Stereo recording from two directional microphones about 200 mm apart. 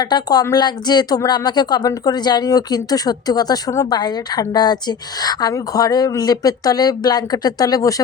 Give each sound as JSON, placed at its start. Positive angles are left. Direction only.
{"t": 0.0, "sound": "a woman's voice", "side_deg": 20}